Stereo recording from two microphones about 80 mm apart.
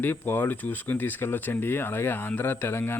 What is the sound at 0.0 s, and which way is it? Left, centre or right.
Speech, left.